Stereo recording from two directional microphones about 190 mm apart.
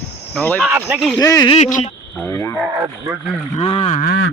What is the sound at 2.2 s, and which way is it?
Speech, 15° left (ahead or behind).